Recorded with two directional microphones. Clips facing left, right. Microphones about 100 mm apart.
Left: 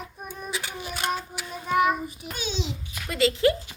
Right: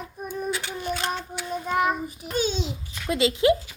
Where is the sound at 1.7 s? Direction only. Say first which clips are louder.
Left 2 dB; 35° right (ahead or behind).